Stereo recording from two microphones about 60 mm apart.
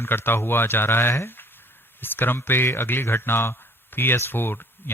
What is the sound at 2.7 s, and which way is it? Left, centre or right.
Speech, left.